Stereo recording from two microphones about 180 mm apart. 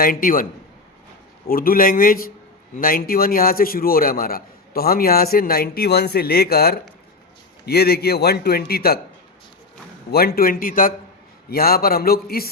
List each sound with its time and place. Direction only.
0.0 s speech: 50° left (ahead or behind)
1.5 s a man's voice: 55° left (ahead or behind)
10.1 s a man's voice: 55° left (ahead or behind)